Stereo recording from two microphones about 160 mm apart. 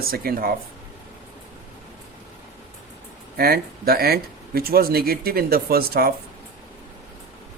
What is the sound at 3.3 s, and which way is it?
Speech, 70° right (ahead or behind).